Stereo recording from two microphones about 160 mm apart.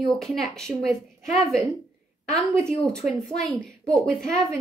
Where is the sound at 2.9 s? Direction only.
5° left (ahead or behind).